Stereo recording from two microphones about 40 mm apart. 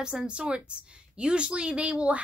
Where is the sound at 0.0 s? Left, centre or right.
Right.